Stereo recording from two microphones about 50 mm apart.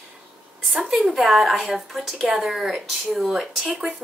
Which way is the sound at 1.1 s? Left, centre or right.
Centre.